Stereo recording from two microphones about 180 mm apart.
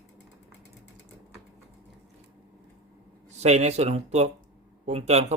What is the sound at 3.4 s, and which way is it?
Speech, 40° right (ahead or behind).